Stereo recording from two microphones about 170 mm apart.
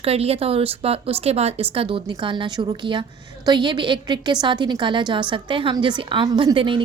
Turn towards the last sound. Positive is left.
turn(degrees=-30)  # may be behind; listen again after turning